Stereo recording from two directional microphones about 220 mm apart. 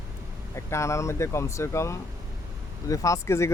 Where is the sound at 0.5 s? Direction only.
15° left (ahead or behind).